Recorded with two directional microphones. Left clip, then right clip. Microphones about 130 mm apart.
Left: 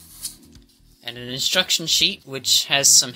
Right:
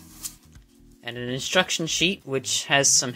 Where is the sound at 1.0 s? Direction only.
30° right (ahead or behind).